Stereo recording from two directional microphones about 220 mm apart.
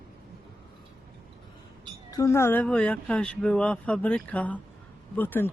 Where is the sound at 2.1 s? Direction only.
15° left (ahead or behind).